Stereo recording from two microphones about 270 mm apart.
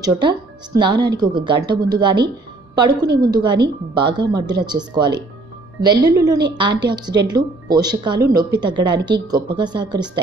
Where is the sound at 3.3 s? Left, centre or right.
Centre.